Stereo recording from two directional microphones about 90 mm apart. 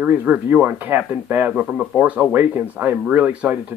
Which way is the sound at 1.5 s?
5° right (ahead or behind).